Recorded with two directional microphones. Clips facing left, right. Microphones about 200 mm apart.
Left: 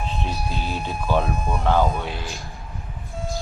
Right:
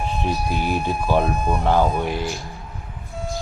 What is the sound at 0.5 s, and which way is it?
Speech, 15° right (ahead or behind).